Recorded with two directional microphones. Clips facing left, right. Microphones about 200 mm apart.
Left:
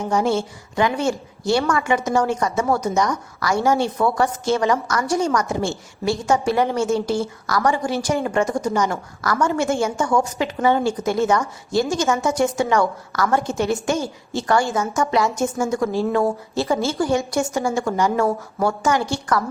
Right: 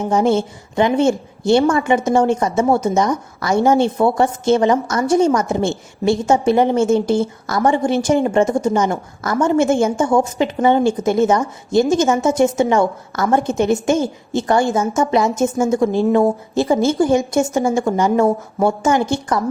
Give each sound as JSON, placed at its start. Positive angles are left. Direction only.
{"t": 0.0, "sound": "a woman's voice", "side_deg": -20}